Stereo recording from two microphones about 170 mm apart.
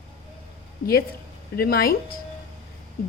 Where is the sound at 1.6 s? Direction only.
65° left (ahead or behind).